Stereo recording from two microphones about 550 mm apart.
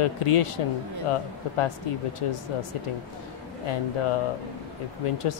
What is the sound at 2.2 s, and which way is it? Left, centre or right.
Speech, left.